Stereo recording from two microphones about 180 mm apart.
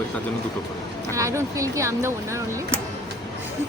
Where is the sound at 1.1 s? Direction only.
15° right (ahead or behind).